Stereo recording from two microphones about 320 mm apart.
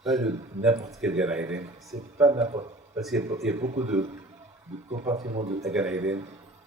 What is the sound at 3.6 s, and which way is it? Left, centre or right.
Speech, centre.